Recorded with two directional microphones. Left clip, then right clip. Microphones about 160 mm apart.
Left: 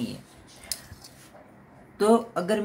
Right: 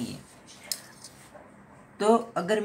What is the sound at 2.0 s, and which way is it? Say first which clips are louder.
Speech: left 2 dB; 15° left (ahead or behind).